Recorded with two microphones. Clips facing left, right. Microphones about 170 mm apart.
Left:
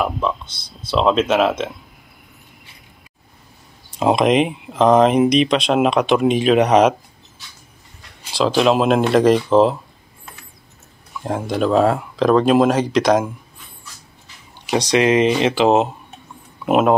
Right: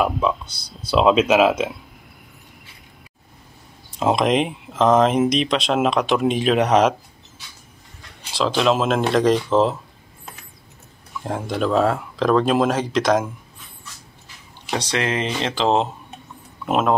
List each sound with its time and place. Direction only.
0.0 s a sound: 5° right (ahead or behind)
0.5 s speech: 35° right (ahead or behind)
0.8 s speech: 10° right (ahead or behind)
4.0 s speech: centre (ahead or behind)
8.4 s speech: 5° left (ahead or behind)
11.2 s speech: 5° left (ahead or behind)
14.7 s speech: 15° left (ahead or behind)